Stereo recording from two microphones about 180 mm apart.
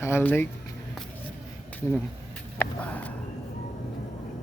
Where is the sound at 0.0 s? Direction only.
10° left (ahead or behind).